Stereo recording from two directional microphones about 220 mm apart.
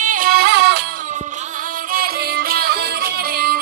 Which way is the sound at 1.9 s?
45° right (ahead or behind).